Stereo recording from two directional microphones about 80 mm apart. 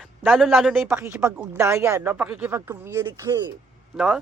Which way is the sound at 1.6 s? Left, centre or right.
Right.